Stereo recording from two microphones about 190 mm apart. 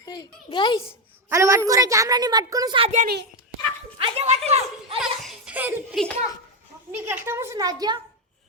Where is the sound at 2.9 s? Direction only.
60° right (ahead or behind).